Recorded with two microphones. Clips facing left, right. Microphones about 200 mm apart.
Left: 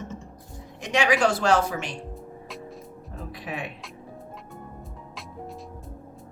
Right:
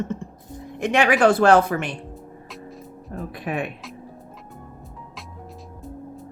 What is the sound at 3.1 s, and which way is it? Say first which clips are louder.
Speech: right 7 dB; 55° right (ahead or behind).